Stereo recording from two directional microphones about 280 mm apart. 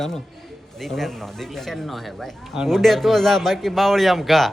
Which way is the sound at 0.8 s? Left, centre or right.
Centre.